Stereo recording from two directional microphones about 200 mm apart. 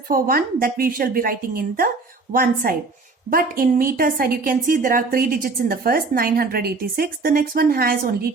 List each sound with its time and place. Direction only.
0.1 s a woman's voice: 45° right (ahead or behind)